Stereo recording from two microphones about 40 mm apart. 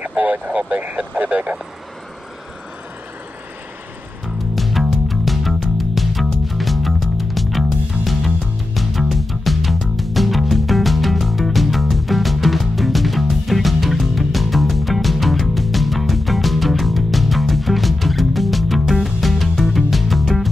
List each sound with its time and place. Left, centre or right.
0.5 s speech: right
4.6 s music: centre